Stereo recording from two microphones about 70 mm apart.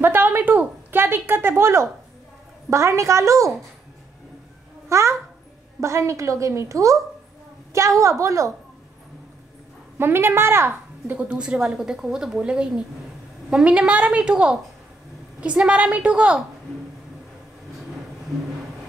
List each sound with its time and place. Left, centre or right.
0.0 s a sound: right
2.7 s a woman's voice: right
4.8 s a child's voice: right
8.0 s a woman's voice: right
9.9 s a woman's voice: right
11.1 s a woman's voice: right